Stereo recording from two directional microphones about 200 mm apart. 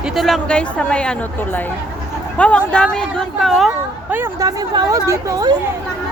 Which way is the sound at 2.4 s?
5° left (ahead or behind).